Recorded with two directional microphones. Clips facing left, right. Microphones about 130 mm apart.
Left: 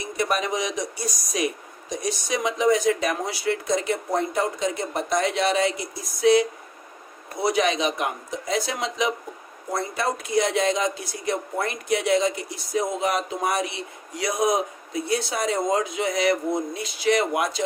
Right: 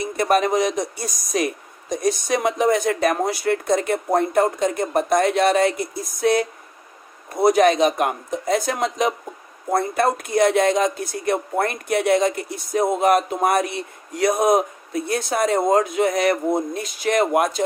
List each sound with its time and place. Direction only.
0.2 s speech: 50° right (ahead or behind)